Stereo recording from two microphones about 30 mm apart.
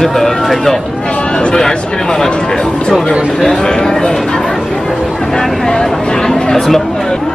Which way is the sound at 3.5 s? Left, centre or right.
Left.